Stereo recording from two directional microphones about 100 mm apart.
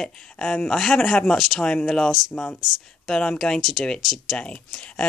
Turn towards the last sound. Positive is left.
turn(degrees=10)  # may be behind; listen again after turning